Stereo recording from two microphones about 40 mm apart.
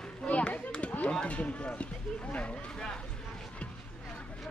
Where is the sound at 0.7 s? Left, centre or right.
Left.